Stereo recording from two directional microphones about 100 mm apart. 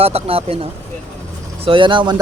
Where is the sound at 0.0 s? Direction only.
75° right (ahead or behind).